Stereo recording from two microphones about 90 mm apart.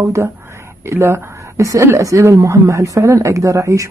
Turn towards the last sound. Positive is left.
turn(degrees=-35)  # may be behind; listen again after turning